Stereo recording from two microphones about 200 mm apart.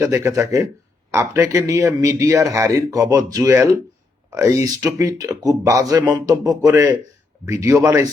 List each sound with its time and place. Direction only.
0.0 s speech: 15° right (ahead or behind)